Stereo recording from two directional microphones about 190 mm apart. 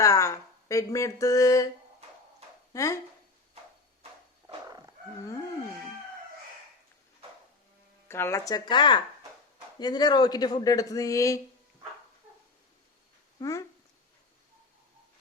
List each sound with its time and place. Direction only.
0.0 s speech: 15° left (ahead or behind)
2.7 s speech: 15° left (ahead or behind)
4.4 s a sound: 20° right (ahead or behind)
8.0 s speech: 15° left (ahead or behind)
13.4 s speech: 20° left (ahead or behind)